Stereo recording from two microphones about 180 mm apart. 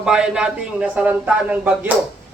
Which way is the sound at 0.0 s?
5° right (ahead or behind).